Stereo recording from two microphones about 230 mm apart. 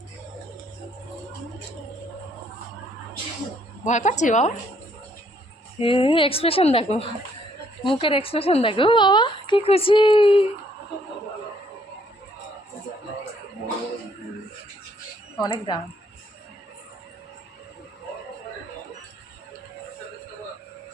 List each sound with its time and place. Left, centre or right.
3.8 s a woman's voice: left
5.8 s a woman's voice: left
15.4 s speech: centre